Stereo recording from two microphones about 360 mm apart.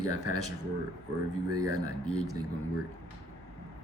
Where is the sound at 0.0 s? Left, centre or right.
Right.